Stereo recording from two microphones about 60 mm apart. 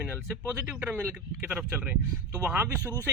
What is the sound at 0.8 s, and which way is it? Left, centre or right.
Speech, right.